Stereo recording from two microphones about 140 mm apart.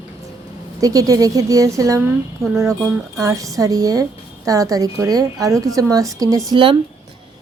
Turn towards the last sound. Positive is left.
turn(degrees=-35)  # may be behind; listen again after turning